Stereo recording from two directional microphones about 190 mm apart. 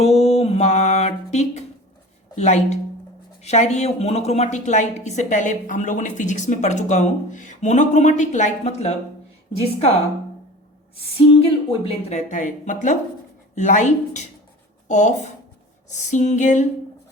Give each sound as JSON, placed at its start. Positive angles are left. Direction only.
{"t": 0.0, "sound": "music", "side_deg": 35}
{"t": 2.4, "sound": "a woman's voice", "side_deg": 40}
{"t": 10.9, "sound": "a woman's voice", "side_deg": 30}